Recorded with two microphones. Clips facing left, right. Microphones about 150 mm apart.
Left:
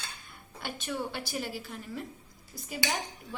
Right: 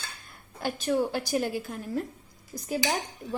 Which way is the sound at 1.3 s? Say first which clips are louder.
Right 8 dB; 45° right (ahead or behind).